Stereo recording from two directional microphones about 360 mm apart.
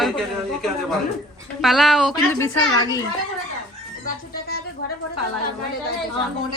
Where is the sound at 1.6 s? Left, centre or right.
Centre.